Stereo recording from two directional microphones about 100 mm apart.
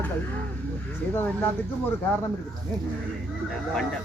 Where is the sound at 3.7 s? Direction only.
5° left (ahead or behind).